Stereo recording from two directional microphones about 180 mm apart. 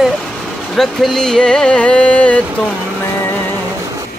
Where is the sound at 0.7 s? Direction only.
Centre (ahead or behind).